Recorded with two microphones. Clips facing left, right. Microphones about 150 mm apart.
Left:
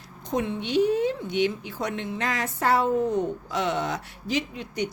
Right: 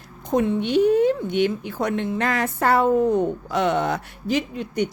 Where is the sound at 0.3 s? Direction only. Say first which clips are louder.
Right 6 dB; 50° right (ahead or behind).